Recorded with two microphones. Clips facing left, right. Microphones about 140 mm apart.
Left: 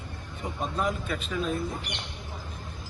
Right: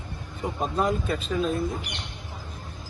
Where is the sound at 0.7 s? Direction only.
35° right (ahead or behind).